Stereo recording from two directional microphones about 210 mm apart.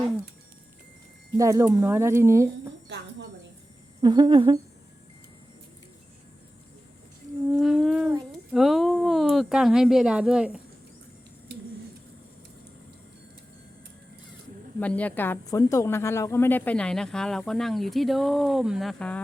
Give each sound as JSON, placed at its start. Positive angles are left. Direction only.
{"t": 1.4, "sound": "speech", "side_deg": -15}
{"t": 2.9, "sound": "a woman's voice", "side_deg": -55}
{"t": 4.0, "sound": "speech", "side_deg": -20}
{"t": 7.6, "sound": "humming", "side_deg": 0}
{"t": 8.5, "sound": "a woman's voice", "side_deg": 0}
{"t": 14.8, "sound": "a woman's voice", "side_deg": 5}